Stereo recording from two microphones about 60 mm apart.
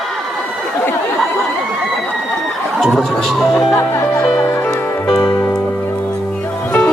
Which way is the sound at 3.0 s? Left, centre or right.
Centre.